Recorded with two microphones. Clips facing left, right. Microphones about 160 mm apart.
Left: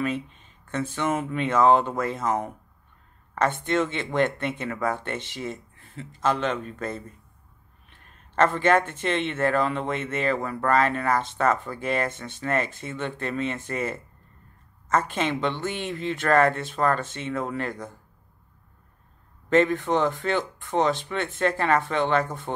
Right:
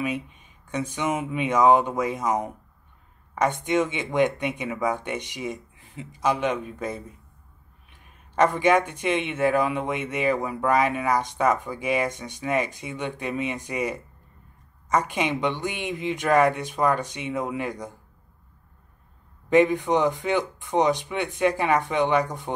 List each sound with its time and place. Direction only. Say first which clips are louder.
0.0 s speech: left 1 dB; 15° right (ahead or behind)
19.5 s speech: right 2 dB; 15° right (ahead or behind)